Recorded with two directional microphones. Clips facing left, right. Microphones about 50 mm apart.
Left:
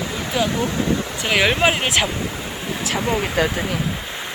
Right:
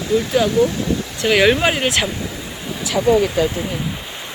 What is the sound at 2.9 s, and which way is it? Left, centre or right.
Speech, left.